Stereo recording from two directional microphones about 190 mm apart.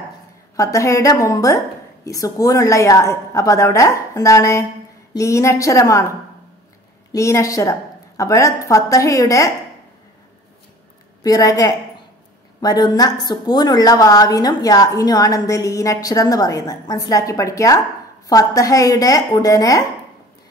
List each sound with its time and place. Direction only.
0.6 s a woman's voice: 15° left (ahead or behind)
11.2 s a woman's voice: 20° left (ahead or behind)